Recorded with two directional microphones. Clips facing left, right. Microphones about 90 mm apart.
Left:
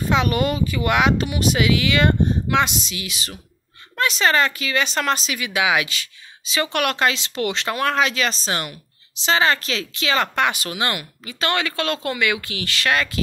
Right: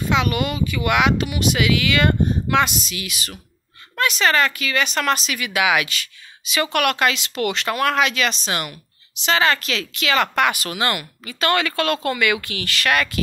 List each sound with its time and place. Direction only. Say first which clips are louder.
0.1 s speech: left 1 dB; 35° left (ahead or behind)